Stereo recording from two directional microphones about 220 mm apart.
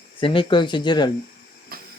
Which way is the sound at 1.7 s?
45° right (ahead or behind).